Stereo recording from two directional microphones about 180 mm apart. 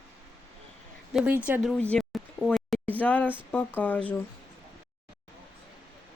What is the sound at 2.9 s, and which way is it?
Speech, 10° left (ahead or behind).